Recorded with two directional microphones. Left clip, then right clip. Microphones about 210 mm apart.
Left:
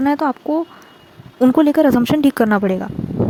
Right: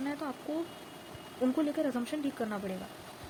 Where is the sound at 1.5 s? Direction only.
55° left (ahead or behind).